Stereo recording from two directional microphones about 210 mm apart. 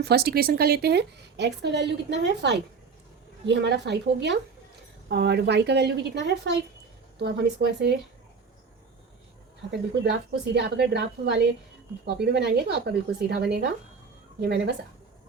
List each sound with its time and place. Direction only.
0.0 s a woman's voice: 50° right (ahead or behind)
10.0 s a woman's voice: 55° right (ahead or behind)